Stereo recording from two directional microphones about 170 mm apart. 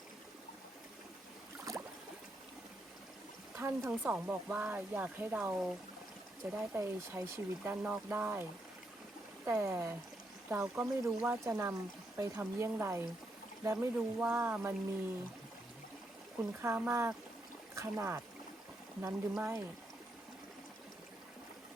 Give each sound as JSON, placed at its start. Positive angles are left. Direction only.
{"t": 1.7, "sound": "boat", "side_deg": -20}
{"t": 3.5, "sound": "speech", "side_deg": -15}
{"t": 16.4, "sound": "speech", "side_deg": -15}
{"t": 19.3, "sound": "speech", "side_deg": -10}